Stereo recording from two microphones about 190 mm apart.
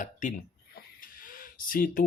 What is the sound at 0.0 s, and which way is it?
Speech, 40° left (ahead or behind).